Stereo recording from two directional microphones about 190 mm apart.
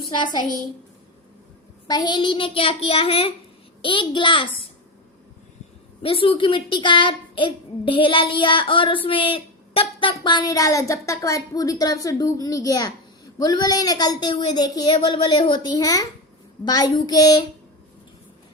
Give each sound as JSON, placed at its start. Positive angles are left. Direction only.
{"t": 0.2, "sound": "a woman's voice", "side_deg": 20}
{"t": 1.9, "sound": "a woman's voice", "side_deg": 20}
{"t": 6.0, "sound": "a woman's voice", "side_deg": 30}